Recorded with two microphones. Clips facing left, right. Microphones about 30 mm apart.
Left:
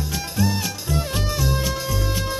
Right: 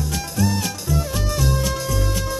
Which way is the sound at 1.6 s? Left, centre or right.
Centre.